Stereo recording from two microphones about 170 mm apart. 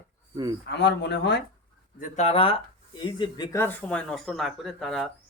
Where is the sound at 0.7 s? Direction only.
90° left.